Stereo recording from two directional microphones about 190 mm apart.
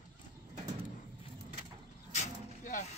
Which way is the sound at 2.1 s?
40° left (ahead or behind).